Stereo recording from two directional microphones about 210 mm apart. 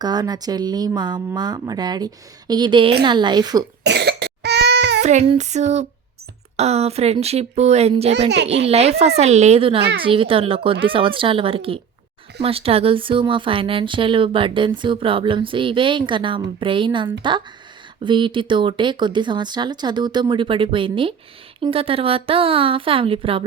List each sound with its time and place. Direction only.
0.0 s speech: 20° right (ahead or behind)
3.8 s cough: 55° right (ahead or behind)
5.0 s speech: 30° right (ahead or behind)
8.3 s a child's voice: 55° right (ahead or behind)
8.6 s speech: 30° right (ahead or behind)